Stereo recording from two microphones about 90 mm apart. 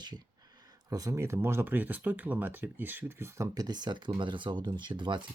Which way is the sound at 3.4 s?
45° right (ahead or behind).